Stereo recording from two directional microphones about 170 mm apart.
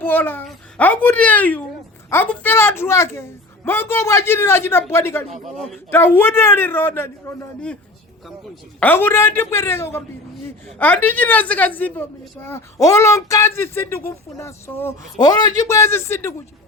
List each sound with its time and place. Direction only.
0.0 s a woman's voice: 10° left (ahead or behind)
8.8 s a woman's voice: 10° left (ahead or behind)
15.2 s a woman's voice: 25° left (ahead or behind)